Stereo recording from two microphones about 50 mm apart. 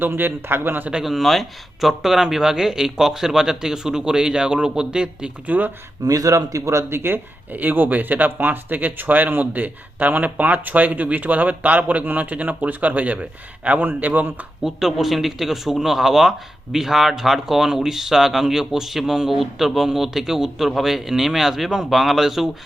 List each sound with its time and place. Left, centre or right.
0.2 s speech: right
1.0 s speech: centre
5.5 s speech: right
6.5 s speech: right
7.5 s speech: right
14.6 s speech: centre